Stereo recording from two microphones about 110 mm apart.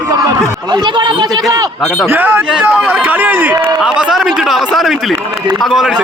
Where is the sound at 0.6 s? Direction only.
40° right (ahead or behind).